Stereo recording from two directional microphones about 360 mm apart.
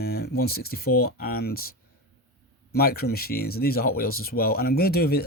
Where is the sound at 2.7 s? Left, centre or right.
Left.